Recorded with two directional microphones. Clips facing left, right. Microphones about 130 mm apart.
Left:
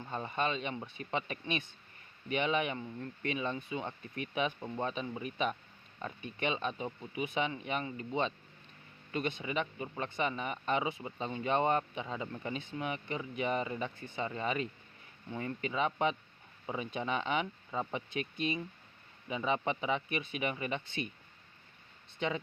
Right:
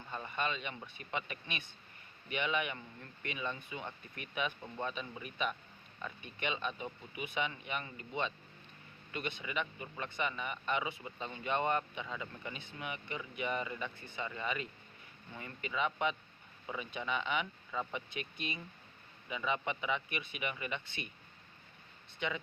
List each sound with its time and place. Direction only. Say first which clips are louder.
0.1 s speech: left 4 dB; 35° left (ahead or behind)
22.2 s speech: left 4 dB; 35° left (ahead or behind)